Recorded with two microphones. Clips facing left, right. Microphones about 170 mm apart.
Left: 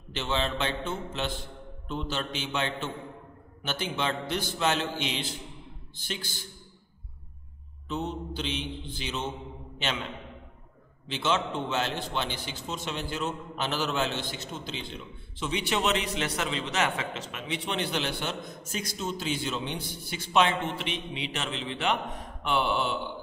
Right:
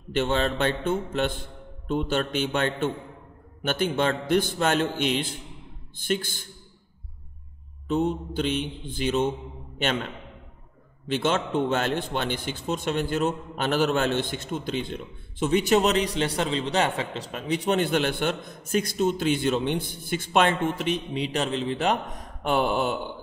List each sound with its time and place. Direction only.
0.1 s a man's voice: 50° right (ahead or behind)
7.9 s a man's voice: 50° right (ahead or behind)
11.1 s a man's voice: 50° right (ahead or behind)